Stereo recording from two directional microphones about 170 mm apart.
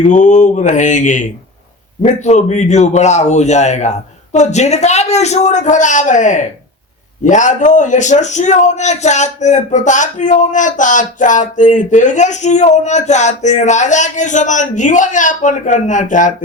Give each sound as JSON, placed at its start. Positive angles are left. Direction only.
{"t": 0.1, "sound": "a man's voice", "side_deg": 45}